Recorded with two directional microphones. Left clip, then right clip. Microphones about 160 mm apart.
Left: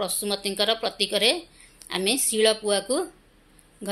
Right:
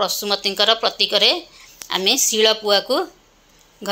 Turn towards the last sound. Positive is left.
turn(degrees=15)  # may be behind; listen again after turning